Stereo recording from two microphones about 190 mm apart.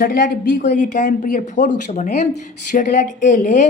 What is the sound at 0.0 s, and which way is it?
Speech, 50° left (ahead or behind).